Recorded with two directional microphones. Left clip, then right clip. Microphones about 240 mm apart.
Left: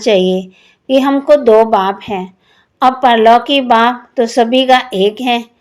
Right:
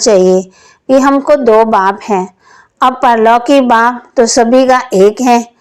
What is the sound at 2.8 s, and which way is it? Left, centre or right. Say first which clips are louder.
A woman's voice: right 1 dB; right.